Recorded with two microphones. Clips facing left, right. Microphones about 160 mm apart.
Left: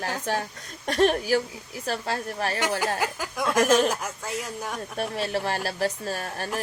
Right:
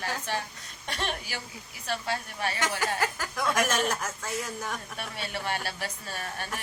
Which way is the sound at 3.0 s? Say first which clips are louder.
Left 2 dB; 15° left (ahead or behind).